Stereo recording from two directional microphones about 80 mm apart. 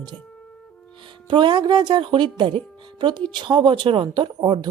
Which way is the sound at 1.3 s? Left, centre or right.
Right.